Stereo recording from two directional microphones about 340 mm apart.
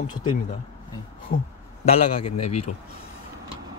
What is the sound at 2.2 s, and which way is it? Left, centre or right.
Speech, left.